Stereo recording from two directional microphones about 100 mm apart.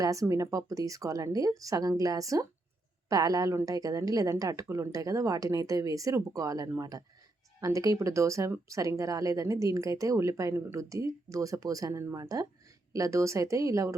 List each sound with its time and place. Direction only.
0.0 s speech: 35° right (ahead or behind)